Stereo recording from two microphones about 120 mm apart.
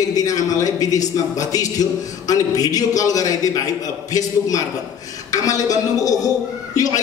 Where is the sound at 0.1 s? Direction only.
30° left (ahead or behind).